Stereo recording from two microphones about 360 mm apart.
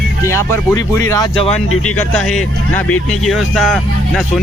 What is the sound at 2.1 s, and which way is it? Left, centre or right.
Speech, centre.